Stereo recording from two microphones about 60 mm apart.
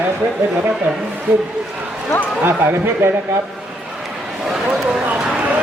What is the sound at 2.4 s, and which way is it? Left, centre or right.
Speech, right.